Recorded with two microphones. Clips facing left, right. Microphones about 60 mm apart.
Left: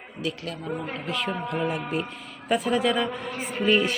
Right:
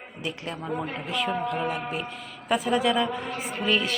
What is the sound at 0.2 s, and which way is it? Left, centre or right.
Speech, right.